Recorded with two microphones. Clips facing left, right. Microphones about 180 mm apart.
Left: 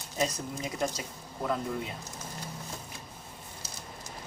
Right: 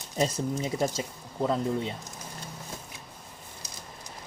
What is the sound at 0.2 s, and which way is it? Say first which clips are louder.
Speech: right 4 dB; 25° right (ahead or behind).